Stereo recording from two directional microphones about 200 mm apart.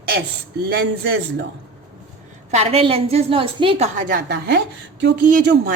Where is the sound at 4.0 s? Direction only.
45° right (ahead or behind).